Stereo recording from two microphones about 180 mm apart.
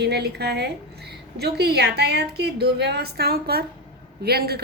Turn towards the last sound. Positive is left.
turn(degrees=-60)  # may be behind; listen again after turning